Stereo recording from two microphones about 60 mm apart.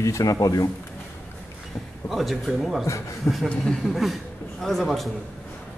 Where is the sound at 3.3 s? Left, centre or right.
Left.